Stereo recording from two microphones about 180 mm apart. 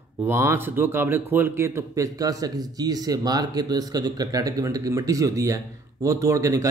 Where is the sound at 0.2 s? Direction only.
15° right (ahead or behind).